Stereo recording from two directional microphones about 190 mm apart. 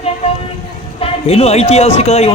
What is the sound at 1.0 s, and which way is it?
A man's voice, 30° left (ahead or behind).